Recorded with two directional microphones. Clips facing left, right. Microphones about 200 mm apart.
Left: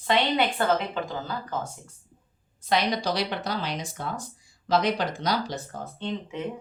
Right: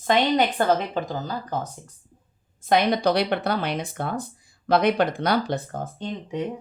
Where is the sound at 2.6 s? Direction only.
55° right (ahead or behind).